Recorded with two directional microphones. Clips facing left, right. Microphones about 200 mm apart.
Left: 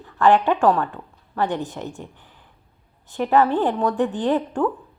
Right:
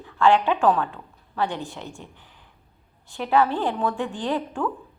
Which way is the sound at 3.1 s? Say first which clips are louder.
Left 3 dB; 45° left (ahead or behind).